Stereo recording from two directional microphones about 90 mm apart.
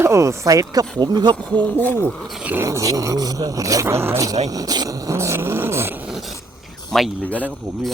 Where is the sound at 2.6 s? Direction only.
35° right (ahead or behind).